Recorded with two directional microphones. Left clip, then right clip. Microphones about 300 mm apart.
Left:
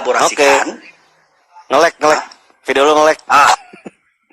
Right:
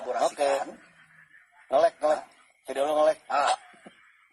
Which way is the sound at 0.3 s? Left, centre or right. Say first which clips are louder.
Left 15 dB; left.